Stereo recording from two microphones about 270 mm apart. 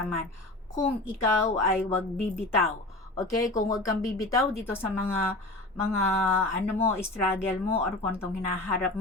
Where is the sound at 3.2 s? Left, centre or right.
Centre.